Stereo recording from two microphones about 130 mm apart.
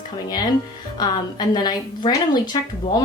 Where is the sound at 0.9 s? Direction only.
35° left (ahead or behind).